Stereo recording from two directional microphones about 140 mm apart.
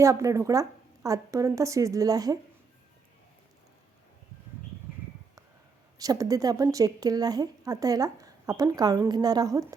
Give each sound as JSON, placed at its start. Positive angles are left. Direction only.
{"t": 0.0, "sound": "a woman's voice", "side_deg": -20}
{"t": 6.0, "sound": "a woman's voice", "side_deg": -25}